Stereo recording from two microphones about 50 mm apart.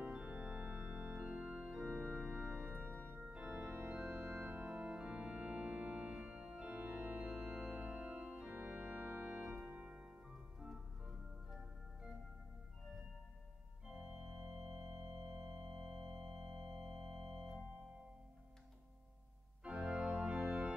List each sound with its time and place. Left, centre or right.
0.0 s organ: right
2.1 s music: right
3.0 s organ: right
9.7 s music: right
10.3 s organ: centre
13.8 s organ: centre
19.6 s organ: centre